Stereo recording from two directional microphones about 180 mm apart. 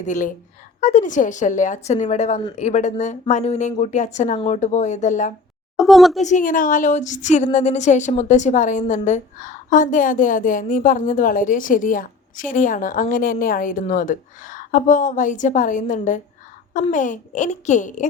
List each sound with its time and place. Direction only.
0.0 s speech: 45° left (ahead or behind)
5.7 s a woman's voice: centre (ahead or behind)
6.2 s speech: 45° left (ahead or behind)